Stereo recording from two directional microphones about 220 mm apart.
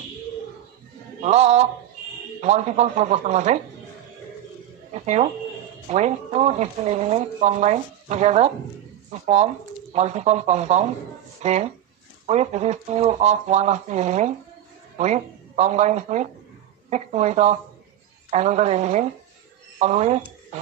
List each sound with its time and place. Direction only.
1.2 s speech: 30° right (ahead or behind)
5.0 s speech: 30° right (ahead or behind)